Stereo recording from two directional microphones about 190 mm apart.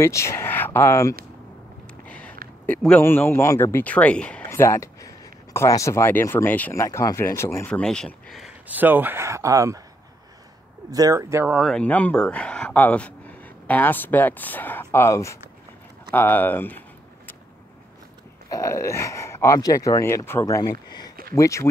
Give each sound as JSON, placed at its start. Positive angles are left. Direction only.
{"t": 0.0, "sound": "speech", "side_deg": 15}
{"t": 2.0, "sound": "a sound", "side_deg": 5}
{"t": 2.6, "sound": "speech", "side_deg": 5}
{"t": 10.9, "sound": "speech", "side_deg": -20}
{"t": 11.5, "sound": "speech", "side_deg": 0}
{"t": 18.5, "sound": "speech", "side_deg": 15}